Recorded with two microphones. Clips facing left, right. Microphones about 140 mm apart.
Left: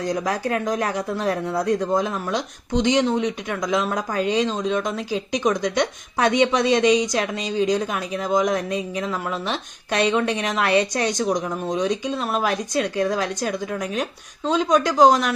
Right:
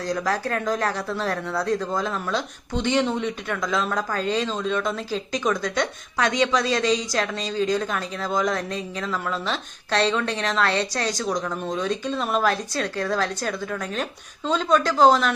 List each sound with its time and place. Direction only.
0.0 s speech: 20° left (ahead or behind)